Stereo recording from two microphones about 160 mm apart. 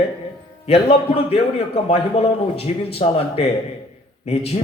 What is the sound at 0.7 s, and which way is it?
A man's voice, 35° left (ahead or behind).